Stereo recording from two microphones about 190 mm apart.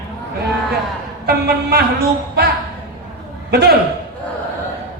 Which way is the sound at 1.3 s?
55° right (ahead or behind).